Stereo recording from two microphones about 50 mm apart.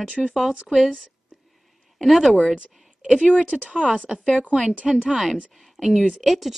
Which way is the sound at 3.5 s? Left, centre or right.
Right.